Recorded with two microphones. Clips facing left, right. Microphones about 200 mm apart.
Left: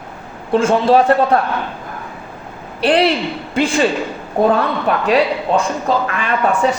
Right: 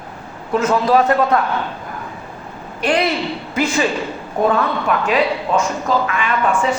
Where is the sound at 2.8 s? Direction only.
30° left (ahead or behind).